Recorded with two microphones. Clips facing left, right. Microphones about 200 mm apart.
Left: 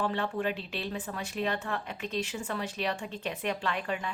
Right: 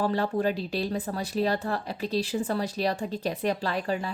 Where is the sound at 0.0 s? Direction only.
35° right (ahead or behind).